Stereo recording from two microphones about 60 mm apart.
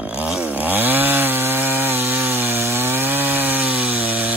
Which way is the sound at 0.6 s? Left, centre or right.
Right.